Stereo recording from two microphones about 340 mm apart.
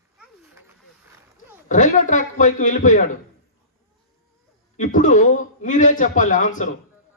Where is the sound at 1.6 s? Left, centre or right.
Left.